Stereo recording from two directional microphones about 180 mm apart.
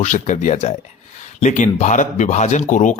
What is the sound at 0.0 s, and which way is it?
Speech, 40° left (ahead or behind).